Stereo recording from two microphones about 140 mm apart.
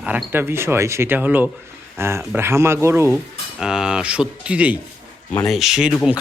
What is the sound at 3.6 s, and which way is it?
Speech, 5° right (ahead or behind).